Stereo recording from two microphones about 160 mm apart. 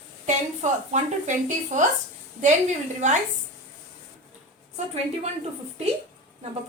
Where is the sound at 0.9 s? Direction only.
50° right (ahead or behind).